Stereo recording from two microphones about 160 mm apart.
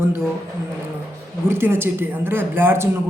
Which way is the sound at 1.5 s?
15° right (ahead or behind).